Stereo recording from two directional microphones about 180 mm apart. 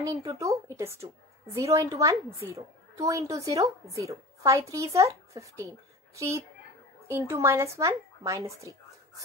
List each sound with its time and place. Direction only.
0.4 s speech: 15° right (ahead or behind)